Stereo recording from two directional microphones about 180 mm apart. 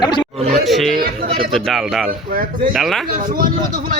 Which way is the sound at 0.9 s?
55° right (ahead or behind).